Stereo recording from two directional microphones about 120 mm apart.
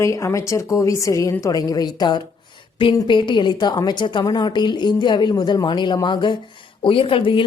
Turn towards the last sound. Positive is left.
turn(degrees=45)  # may be behind; listen again after turning